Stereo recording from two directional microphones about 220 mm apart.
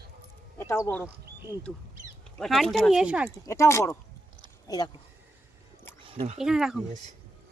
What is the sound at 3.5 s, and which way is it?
Speech, 15° left (ahead or behind).